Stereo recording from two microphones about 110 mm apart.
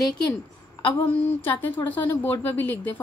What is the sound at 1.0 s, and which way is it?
A woman's voice, 20° left (ahead or behind).